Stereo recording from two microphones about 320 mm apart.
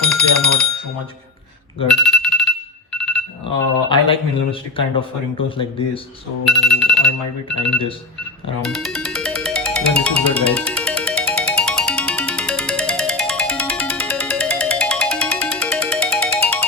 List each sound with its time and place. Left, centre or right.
0.1 s a sound: centre
2.0 s alarm: centre
2.9 s a sound: centre
3.8 s speech: centre
6.4 s speech: centre
8.6 s music: centre